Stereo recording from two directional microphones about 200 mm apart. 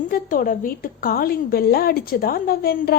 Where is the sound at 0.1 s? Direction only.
45° left (ahead or behind).